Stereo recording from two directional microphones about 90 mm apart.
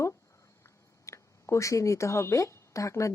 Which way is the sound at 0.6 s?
35° left (ahead or behind).